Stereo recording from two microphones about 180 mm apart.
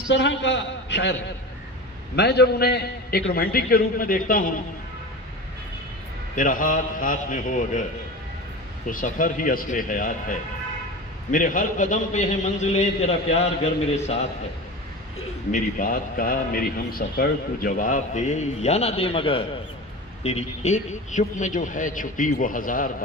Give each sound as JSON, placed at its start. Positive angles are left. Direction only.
{"t": 0.1, "sound": "a man's voice", "side_deg": 85}
{"t": 2.1, "sound": "a man's voice", "side_deg": 65}
{"t": 6.3, "sound": "a man's voice", "side_deg": 50}
{"t": 8.8, "sound": "a man's voice", "side_deg": 50}
{"t": 15.5, "sound": "a man's voice", "side_deg": 50}